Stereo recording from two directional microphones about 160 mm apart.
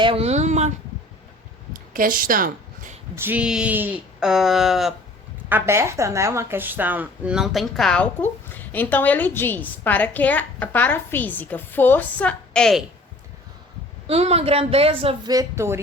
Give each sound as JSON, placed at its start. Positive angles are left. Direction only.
{"t": 0.0, "sound": "speech", "side_deg": -35}
{"t": 1.7, "sound": "a sound", "side_deg": -60}
{"t": 3.2, "sound": "speech", "side_deg": -10}
{"t": 5.5, "sound": "speech", "side_deg": -15}
{"t": 14.1, "sound": "speech", "side_deg": -40}